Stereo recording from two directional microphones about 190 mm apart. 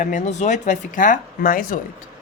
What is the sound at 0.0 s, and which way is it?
Speech, 40° left (ahead or behind).